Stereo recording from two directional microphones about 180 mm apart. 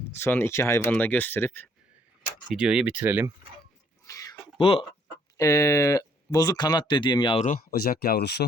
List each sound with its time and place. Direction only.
0.2 s speech: 15° left (ahead or behind)
2.5 s speech: 5° right (ahead or behind)
3.0 s mechanisms: 10° right (ahead or behind)
4.0 s a sound: 15° left (ahead or behind)
4.5 s speech: 30° left (ahead or behind)
5.4 s speech: 15° left (ahead or behind)
7.4 s speech: 55° left (ahead or behind)